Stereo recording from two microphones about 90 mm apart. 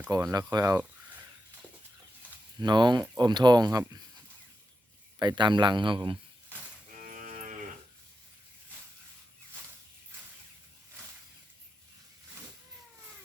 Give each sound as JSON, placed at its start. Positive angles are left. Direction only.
{"t": 0.3, "sound": "speech", "side_deg": -45}
{"t": 2.6, "sound": "speech", "side_deg": -55}
{"t": 5.2, "sound": "a man's voice", "side_deg": -55}